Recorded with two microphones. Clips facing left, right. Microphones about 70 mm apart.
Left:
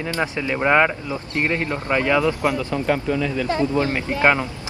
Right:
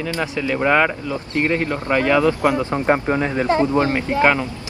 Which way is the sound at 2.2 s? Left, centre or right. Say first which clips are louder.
Right 3 dB; right.